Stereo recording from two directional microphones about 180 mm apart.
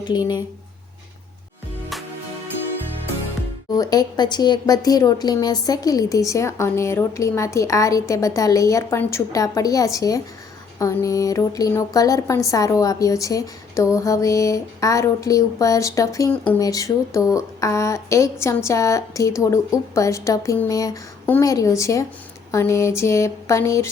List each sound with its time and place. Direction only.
0.0 s a woman's voice: 25° left (ahead or behind)
3.8 s a woman's voice: 20° left (ahead or behind)